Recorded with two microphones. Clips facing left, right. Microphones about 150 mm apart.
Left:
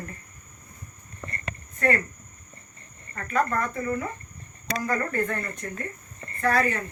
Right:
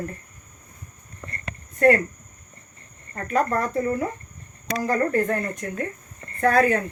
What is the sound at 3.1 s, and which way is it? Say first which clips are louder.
Speech: right 3 dB; 35° right (ahead or behind).